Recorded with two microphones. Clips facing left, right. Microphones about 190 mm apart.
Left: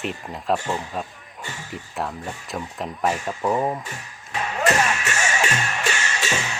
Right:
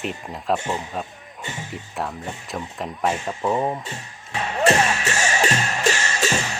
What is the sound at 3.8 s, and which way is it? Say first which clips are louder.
Music: right 1 dB; 25° right (ahead or behind).